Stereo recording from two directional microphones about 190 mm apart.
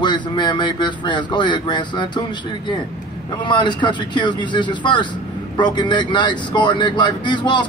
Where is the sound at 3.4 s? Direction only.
25° left (ahead or behind).